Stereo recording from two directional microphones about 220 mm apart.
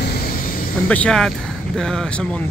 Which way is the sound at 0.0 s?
40° left (ahead or behind).